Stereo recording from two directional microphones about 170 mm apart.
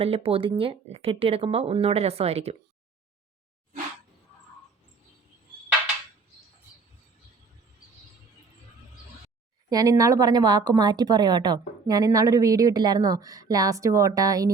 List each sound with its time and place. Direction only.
0.0 s speech: 35° right (ahead or behind)
9.6 s speech: 20° right (ahead or behind)